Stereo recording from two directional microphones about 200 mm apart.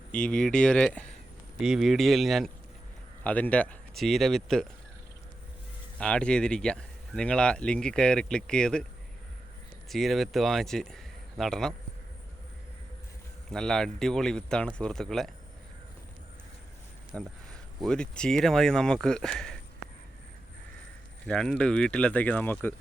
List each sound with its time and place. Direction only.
0.1 s speech: 5° left (ahead or behind)
6.0 s speech: 5° left (ahead or behind)
9.9 s speech: centre (ahead or behind)
13.5 s speech: 5° left (ahead or behind)
17.1 s speech: centre (ahead or behind)
21.2 s speech: 5° left (ahead or behind)